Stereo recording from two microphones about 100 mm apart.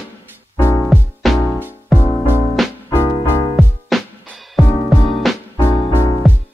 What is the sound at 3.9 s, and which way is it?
Music, centre (ahead or behind).